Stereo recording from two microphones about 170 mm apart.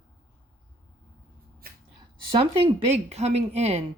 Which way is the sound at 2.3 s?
35° right (ahead or behind).